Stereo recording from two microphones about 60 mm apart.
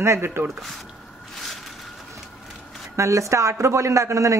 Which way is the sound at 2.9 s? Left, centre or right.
Right.